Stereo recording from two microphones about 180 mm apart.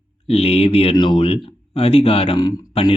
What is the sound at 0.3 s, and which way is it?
Speech, 35° left (ahead or behind).